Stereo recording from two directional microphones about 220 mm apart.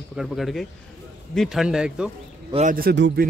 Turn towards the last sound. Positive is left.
turn(degrees=-45)  # may be behind; listen again after turning